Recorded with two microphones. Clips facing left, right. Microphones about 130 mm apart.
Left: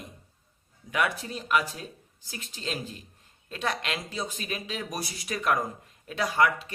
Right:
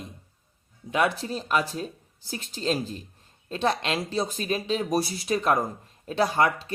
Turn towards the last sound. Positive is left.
turn(degrees=-30)  # may be behind; listen again after turning